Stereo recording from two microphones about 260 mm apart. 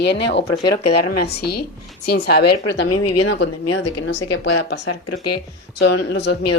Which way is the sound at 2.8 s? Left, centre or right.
Left.